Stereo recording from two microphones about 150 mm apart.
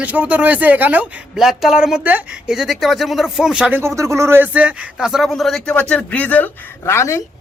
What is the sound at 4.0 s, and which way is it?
Speech, 20° right (ahead or behind).